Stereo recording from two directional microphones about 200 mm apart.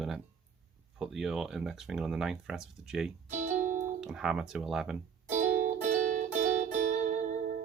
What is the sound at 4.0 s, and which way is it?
Speech, 5° right (ahead or behind).